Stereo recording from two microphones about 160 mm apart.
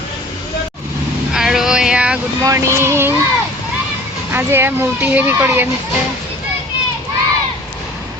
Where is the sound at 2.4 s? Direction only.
20° right (ahead or behind).